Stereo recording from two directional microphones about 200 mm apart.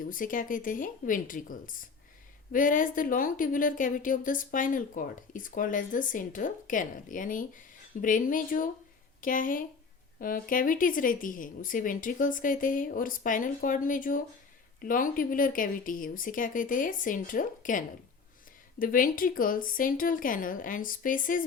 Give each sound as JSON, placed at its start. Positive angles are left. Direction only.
{"t": 0.0, "sound": "a woman's voice", "side_deg": 45}